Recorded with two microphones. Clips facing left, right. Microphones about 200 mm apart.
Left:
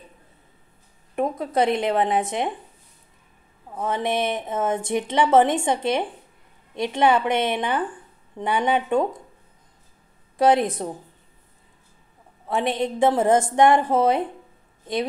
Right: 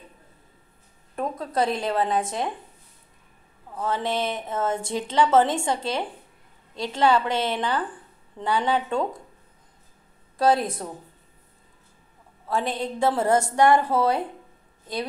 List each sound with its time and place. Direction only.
1.1 s a woman's voice: 20° left (ahead or behind)
3.7 s a woman's voice: 20° left (ahead or behind)
10.3 s a woman's voice: 20° left (ahead or behind)
12.4 s a woman's voice: 20° left (ahead or behind)